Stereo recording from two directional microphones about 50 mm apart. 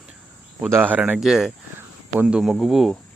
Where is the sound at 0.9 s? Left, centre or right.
Right.